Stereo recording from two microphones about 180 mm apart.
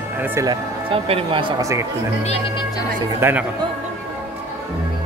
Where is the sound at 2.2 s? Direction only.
25° left (ahead or behind).